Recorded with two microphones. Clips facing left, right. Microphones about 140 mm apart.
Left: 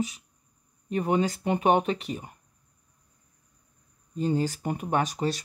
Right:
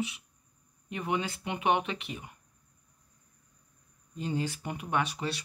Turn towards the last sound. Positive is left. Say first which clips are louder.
# left 5 dB
turn(degrees=40)  # may be behind; listen again after turning